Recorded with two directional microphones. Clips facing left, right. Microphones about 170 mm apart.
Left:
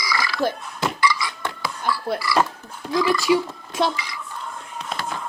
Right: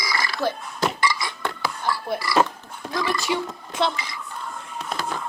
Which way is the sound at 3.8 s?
15° left (ahead or behind).